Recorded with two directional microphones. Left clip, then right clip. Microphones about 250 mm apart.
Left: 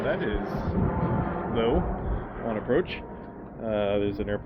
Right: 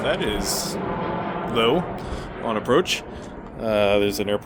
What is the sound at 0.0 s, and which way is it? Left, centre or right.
Speech, centre.